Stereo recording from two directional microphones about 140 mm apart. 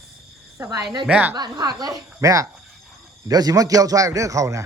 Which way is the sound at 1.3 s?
30° right (ahead or behind).